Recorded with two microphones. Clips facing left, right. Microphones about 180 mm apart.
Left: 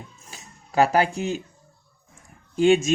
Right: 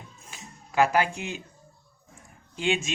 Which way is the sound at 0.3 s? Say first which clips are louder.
Even; 35° left (ahead or behind).